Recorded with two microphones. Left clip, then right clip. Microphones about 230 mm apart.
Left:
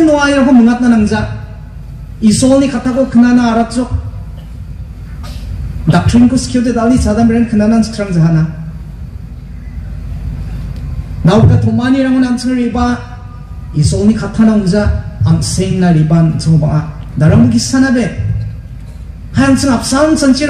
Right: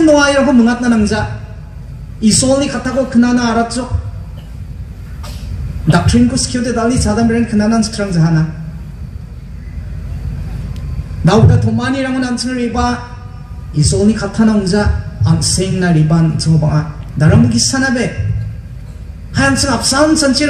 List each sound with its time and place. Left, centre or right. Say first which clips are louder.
0.0 s a sound: even; right
2.1 s a man's voice: left 3 dB; right
5.9 s a man's voice: left 2 dB; right
11.2 s a man's voice: left 1 dB; right
19.3 s a man's voice: left 2 dB; right